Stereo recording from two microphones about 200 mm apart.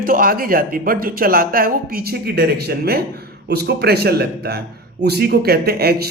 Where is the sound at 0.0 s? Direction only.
45° right (ahead or behind).